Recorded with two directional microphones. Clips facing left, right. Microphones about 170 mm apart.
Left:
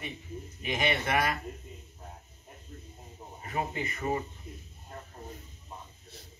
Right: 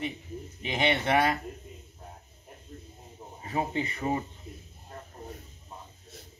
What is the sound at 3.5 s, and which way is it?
Speech, 25° right (ahead or behind).